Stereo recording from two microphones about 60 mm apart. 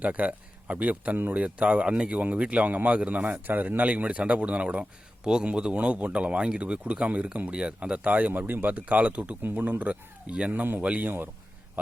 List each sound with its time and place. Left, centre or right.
0.0 s speech: right
8.3 s speech: right
10.5 s speech: right
10.8 s speech: right